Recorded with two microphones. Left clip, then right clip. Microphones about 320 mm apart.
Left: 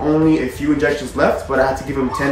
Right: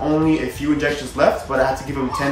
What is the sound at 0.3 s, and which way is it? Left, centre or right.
Speech, centre.